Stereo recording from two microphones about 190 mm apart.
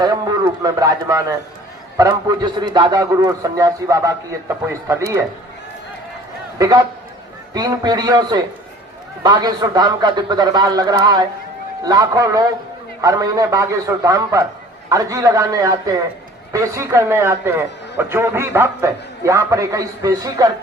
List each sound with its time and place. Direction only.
0.0 s a man's voice: 20° right (ahead or behind)
6.6 s a man's voice: 20° right (ahead or behind)